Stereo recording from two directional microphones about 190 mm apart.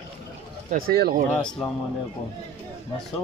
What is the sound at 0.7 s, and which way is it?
Speech, 50° right (ahead or behind).